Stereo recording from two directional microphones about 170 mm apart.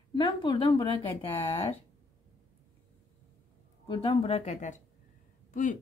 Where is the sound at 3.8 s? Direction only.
30° left (ahead or behind).